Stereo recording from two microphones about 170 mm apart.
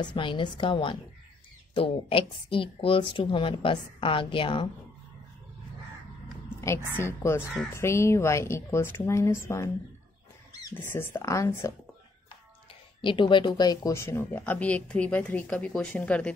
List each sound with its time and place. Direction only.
0.0 s a woman's voice: 30° left (ahead or behind)
6.6 s speech: 15° left (ahead or behind)
10.7 s speech: 10° left (ahead or behind)
13.0 s speech: 30° left (ahead or behind); by 16.3 s 5° left (ahead or behind)